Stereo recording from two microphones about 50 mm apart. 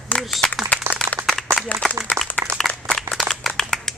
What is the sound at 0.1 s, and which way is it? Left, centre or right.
Applause, left.